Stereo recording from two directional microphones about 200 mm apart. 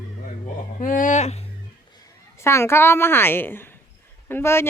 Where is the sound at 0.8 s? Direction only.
40° left (ahead or behind).